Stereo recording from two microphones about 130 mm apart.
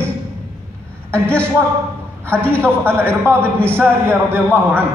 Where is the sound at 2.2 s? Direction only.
15° right (ahead or behind).